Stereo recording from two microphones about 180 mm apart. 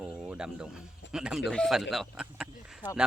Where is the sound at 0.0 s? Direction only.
5° right (ahead or behind).